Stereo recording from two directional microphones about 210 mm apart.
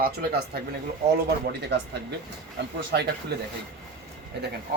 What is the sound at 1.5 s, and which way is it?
Speech, 55° right (ahead or behind).